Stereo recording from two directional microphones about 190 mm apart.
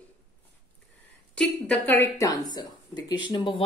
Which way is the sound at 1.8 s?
10° left (ahead or behind).